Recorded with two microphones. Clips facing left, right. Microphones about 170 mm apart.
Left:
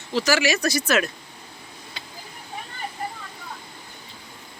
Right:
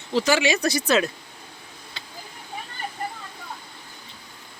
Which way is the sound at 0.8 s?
15° right (ahead or behind).